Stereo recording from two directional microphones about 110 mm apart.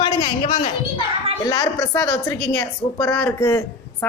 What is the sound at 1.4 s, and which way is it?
A woman's voice, 30° left (ahead or behind).